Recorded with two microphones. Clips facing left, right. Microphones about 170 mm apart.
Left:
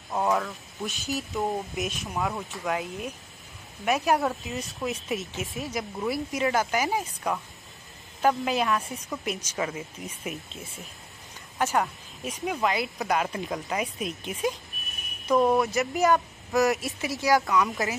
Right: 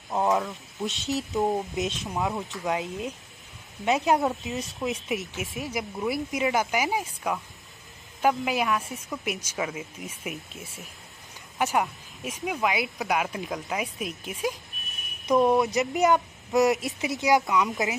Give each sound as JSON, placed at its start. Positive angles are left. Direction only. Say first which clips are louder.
{"t": 0.1, "sound": "speech", "louder": "right 1 dB", "side_deg": -20}
{"t": 15.2, "sound": "speech", "louder": "right 1 dB", "side_deg": -20}